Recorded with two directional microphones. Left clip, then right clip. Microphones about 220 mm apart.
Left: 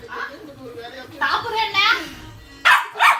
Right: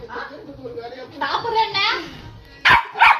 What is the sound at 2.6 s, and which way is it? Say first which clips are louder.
Dog: right 1 dB; 25° left (ahead or behind).